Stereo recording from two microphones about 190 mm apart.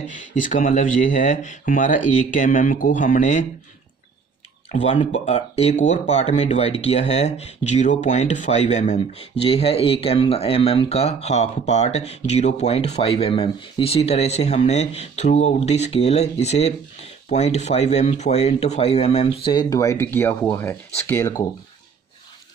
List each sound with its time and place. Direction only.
0.3 s speech: 40° left (ahead or behind)
4.7 s speech: 35° left (ahead or behind); by 21.5 s 15° left (ahead or behind)